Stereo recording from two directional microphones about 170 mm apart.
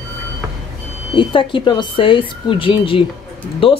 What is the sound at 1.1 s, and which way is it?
A woman's voice, 30° left (ahead or behind).